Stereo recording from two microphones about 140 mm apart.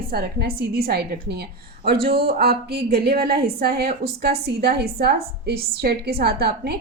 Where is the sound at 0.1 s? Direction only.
90° right.